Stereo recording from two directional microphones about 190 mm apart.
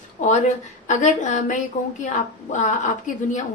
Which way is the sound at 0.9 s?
40° left (ahead or behind).